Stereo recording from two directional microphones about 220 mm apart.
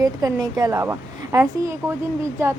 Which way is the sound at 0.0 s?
20° right (ahead or behind).